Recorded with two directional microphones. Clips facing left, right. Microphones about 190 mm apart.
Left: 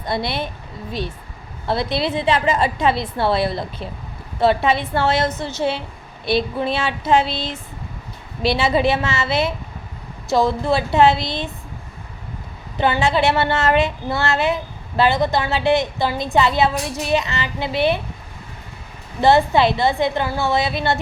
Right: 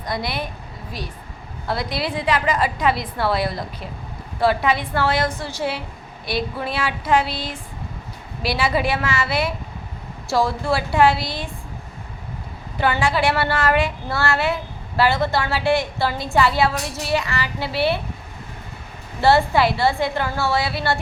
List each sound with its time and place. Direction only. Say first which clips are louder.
0.0 s speech: left 3 dB; 25° left (ahead or behind)
1.6 s speech: left 4 dB; 25° left (ahead or behind)
12.8 s speech: left 2 dB; 20° left (ahead or behind)
19.2 s speech: left 2 dB; 20° left (ahead or behind)